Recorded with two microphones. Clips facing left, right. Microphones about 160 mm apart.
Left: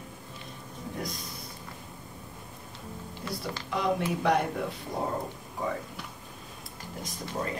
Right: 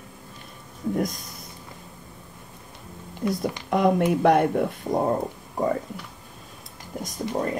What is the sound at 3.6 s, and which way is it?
Speech, 55° right (ahead or behind).